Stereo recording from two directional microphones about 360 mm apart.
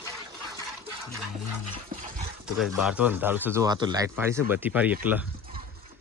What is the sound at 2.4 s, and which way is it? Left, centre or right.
Speech, centre.